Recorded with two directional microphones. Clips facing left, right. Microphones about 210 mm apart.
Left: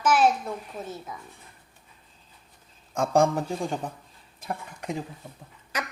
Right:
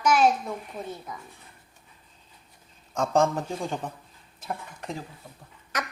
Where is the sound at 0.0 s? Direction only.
5° left (ahead or behind).